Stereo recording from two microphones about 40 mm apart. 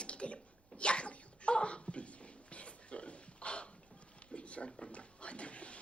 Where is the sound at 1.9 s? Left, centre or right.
Left.